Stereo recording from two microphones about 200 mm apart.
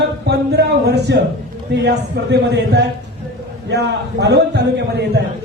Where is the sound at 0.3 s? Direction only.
55° right (ahead or behind).